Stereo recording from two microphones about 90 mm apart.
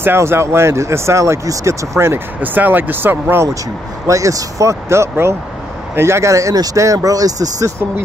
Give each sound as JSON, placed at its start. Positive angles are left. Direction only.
{"t": 0.0, "sound": "speech", "side_deg": -25}
{"t": 4.1, "sound": "speech", "side_deg": -40}